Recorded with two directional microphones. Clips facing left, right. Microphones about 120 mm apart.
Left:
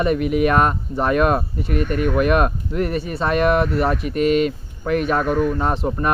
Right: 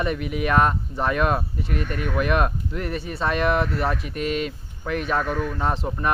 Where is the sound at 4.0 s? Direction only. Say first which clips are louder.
Left 9 dB; 65° left (ahead or behind).